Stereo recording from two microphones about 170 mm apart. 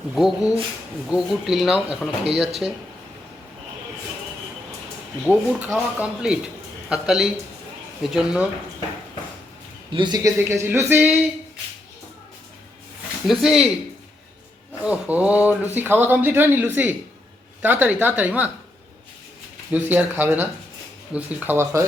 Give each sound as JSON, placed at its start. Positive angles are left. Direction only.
{"t": 0.1, "sound": "speech", "side_deg": 0}
{"t": 5.2, "sound": "speech", "side_deg": -5}
{"t": 9.9, "sound": "speech", "side_deg": -25}
{"t": 10.3, "sound": "speech", "side_deg": -15}
{"t": 13.2, "sound": "speech", "side_deg": 0}
{"t": 14.8, "sound": "speech", "side_deg": -10}
{"t": 19.7, "sound": "speech", "side_deg": -10}